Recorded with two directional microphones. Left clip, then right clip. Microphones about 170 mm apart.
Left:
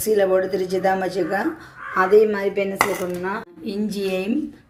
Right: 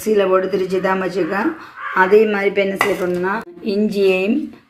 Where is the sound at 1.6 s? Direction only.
15° right (ahead or behind).